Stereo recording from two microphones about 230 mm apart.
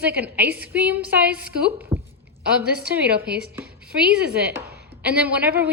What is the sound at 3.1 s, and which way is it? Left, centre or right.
Speech, right.